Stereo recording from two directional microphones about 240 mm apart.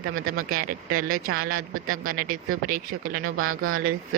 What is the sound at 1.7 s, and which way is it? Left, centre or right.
Speech, right.